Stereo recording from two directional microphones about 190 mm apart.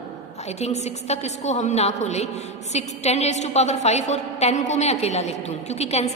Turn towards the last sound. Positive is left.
turn(degrees=35)  # may be behind; listen again after turning